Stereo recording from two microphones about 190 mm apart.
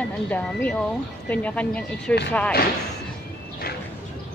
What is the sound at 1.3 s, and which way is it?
Speech, 5° left (ahead or behind).